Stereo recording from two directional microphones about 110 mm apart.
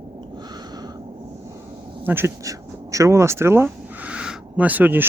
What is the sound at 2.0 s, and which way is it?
Speech, 20° right (ahead or behind).